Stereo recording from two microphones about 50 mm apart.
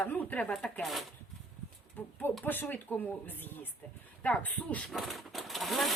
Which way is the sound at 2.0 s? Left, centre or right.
Left.